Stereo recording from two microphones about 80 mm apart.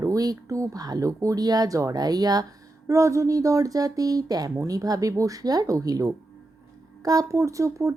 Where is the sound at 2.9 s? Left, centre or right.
Right.